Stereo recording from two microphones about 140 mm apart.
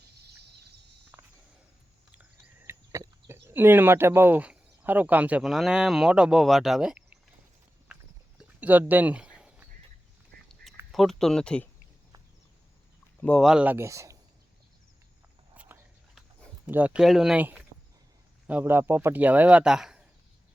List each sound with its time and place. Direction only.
2.6 s speech: 20° right (ahead or behind); by 7.0 s 5° right (ahead or behind)
8.4 s a sound: 10° right (ahead or behind)
10.6 s duck: 90° right
10.9 s speech: centre (ahead or behind)
13.2 s speech: centre (ahead or behind)
13.7 s speech: 20° right (ahead or behind)
16.6 s speech: 10° right (ahead or behind)